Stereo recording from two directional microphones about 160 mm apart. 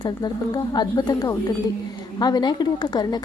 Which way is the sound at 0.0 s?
25° left (ahead or behind).